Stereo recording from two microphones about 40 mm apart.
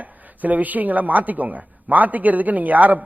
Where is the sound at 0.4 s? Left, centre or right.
Right.